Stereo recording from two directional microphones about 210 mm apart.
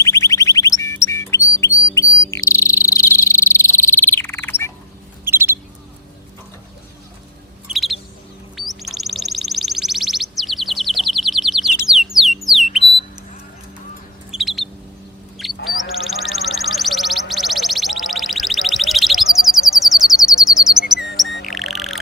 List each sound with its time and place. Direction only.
0.0 s squawk: 15° left (ahead or behind)
2.3 s frog: 15° left (ahead or behind)
5.2 s bird: 10° right (ahead or behind)
7.7 s bird: centre (ahead or behind)
11.9 s a sound: centre (ahead or behind)
14.3 s bird: centre (ahead or behind)
15.5 s duck: 40° left (ahead or behind)
15.9 s quack: centre (ahead or behind)
21.4 s bird: centre (ahead or behind)